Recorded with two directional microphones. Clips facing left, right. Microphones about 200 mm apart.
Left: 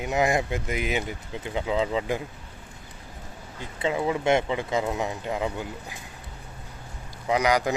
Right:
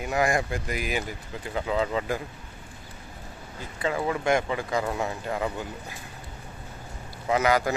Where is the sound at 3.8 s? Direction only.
20° left (ahead or behind).